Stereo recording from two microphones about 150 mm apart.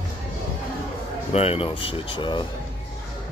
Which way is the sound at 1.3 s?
40° left (ahead or behind).